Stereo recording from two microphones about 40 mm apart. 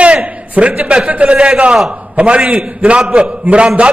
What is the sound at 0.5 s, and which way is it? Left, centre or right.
A man's voice, right.